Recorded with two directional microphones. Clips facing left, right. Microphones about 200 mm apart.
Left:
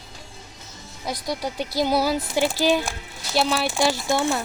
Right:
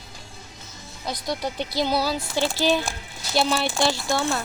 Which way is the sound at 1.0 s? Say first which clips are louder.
Even; 10° left (ahead or behind).